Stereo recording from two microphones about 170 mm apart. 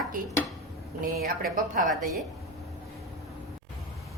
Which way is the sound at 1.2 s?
55° right (ahead or behind).